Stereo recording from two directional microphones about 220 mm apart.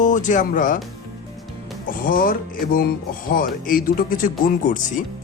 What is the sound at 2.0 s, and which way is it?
Speech, 40° left (ahead or behind).